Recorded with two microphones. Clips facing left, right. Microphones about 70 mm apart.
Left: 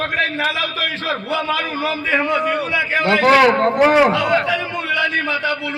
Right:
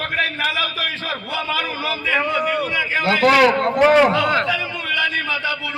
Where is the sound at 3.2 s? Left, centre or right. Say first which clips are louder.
Left 1 dB; left.